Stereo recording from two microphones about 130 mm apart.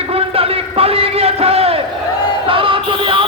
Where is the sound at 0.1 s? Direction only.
50° right (ahead or behind).